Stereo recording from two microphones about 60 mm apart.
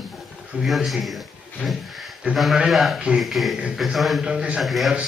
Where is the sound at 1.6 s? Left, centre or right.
Centre.